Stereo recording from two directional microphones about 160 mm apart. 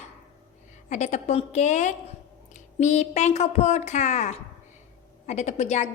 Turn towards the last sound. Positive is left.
turn(degrees=45)  # may be behind; listen again after turning